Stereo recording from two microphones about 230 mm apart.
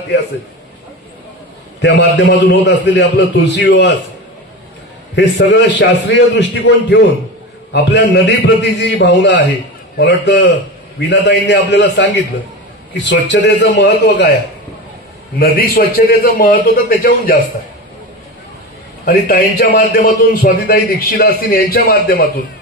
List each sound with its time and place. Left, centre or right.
1.8 s a man's voice: left
5.1 s a man's voice: left
15.3 s a man's voice: left
19.0 s a man's voice: left